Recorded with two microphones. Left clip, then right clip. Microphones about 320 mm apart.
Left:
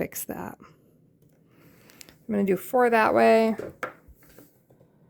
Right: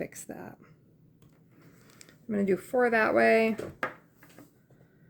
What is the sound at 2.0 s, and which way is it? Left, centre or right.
Speech, left.